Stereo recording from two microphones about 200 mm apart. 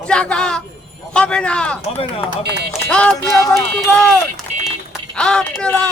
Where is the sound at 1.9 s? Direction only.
30° left (ahead or behind).